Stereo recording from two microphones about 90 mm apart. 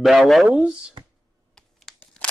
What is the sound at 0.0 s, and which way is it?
Speech, centre (ahead or behind).